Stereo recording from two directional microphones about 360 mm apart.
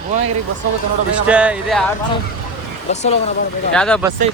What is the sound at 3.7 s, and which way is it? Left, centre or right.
Speech, centre.